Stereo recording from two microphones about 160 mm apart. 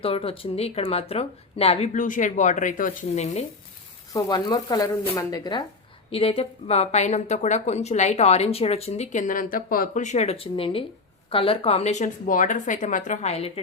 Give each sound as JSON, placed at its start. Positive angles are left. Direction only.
{"t": 0.0, "sound": "a woman's voice", "side_deg": 35}
{"t": 4.1, "sound": "speech", "side_deg": 25}
{"t": 6.1, "sound": "a woman's voice", "side_deg": 35}